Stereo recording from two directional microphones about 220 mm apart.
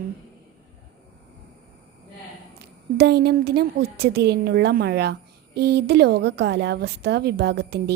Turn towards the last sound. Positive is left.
turn(degrees=-45)  # may be behind; listen again after turning